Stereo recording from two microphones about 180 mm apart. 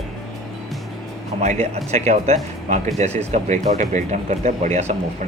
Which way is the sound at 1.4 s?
40° right (ahead or behind).